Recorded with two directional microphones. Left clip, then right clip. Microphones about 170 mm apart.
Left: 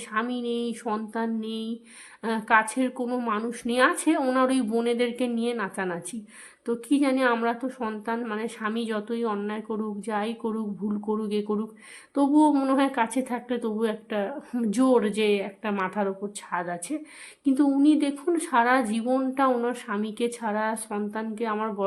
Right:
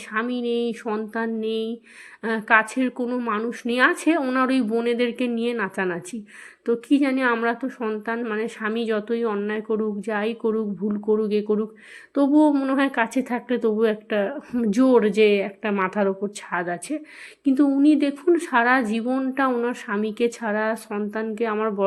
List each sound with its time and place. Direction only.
0.1 s a woman's voice: 15° right (ahead or behind)